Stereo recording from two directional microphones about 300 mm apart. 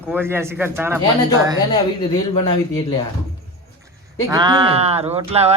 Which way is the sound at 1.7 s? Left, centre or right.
Centre.